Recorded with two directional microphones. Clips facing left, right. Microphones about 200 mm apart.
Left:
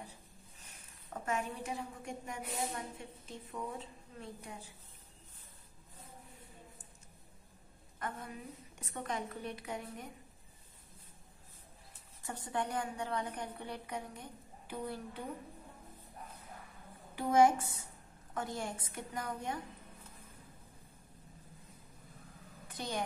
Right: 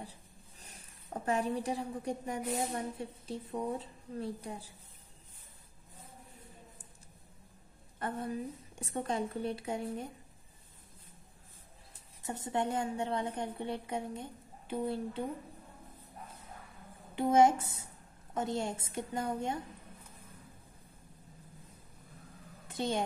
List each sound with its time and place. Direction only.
0.6 s a woman's voice: 35° right (ahead or behind)
8.0 s a woman's voice: 30° right (ahead or behind)
12.2 s a woman's voice: 20° right (ahead or behind)
17.1 s a woman's voice: 25° right (ahead or behind)
22.7 s a woman's voice: 25° right (ahead or behind)